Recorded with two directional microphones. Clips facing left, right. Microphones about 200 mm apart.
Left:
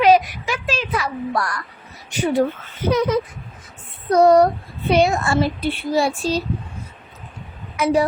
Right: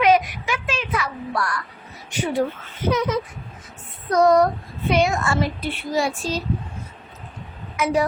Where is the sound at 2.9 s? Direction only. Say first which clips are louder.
Left 4 dB; 35° left (ahead or behind).